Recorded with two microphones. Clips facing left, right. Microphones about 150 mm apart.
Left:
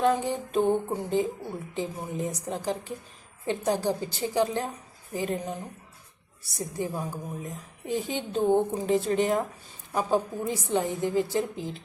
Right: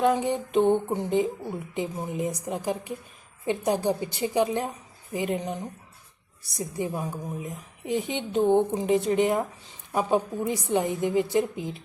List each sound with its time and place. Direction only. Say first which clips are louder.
0.0 s a woman's voice: right 2 dB; 15° right (ahead or behind)